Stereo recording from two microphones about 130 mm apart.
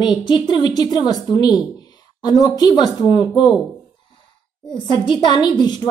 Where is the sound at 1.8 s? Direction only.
30° left (ahead or behind).